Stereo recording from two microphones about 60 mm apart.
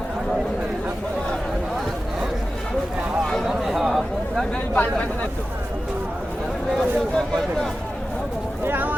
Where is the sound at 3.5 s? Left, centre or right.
Centre.